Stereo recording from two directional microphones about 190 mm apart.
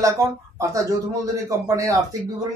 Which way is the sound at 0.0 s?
15° right (ahead or behind).